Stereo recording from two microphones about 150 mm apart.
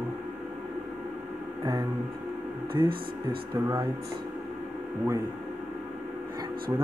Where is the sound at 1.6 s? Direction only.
30° right (ahead or behind).